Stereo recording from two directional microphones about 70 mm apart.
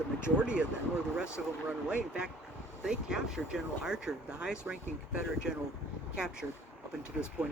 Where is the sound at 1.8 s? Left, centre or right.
Centre.